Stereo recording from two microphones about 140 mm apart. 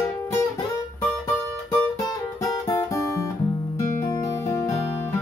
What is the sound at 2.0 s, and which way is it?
Music, 25° left (ahead or behind).